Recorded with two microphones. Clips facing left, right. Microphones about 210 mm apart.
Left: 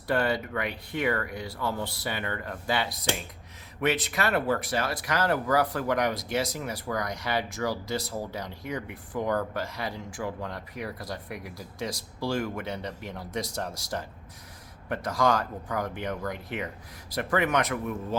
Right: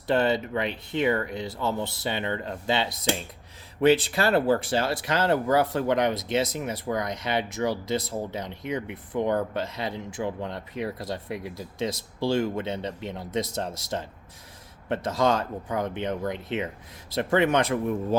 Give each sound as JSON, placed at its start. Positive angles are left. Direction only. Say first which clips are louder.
{"t": 0.1, "sound": "speech", "louder": "right 3 dB", "side_deg": -25}